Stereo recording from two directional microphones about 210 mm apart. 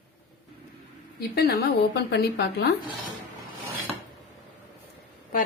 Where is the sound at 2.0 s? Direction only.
50° left (ahead or behind).